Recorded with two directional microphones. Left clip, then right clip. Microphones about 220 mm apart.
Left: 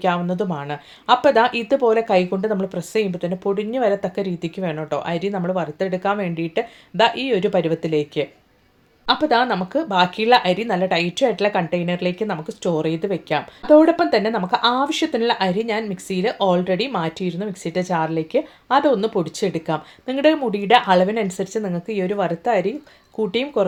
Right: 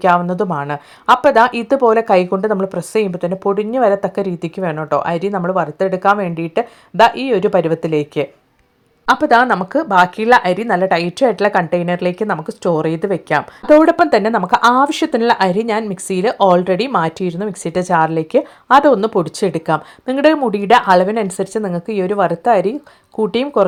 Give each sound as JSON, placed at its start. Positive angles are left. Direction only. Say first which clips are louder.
{"t": 0.0, "sound": "speech", "louder": "right 7 dB", "side_deg": -20}